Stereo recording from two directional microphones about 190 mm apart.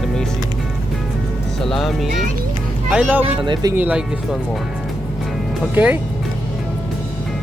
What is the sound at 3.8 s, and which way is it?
Speech, 5° right (ahead or behind).